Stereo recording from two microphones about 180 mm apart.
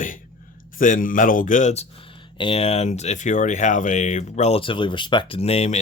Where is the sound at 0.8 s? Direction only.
50° left (ahead or behind).